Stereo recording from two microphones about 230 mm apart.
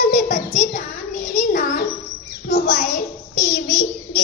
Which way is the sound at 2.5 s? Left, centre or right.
Left.